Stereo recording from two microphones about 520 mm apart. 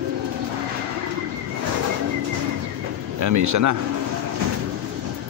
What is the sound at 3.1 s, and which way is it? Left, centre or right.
Speech, right.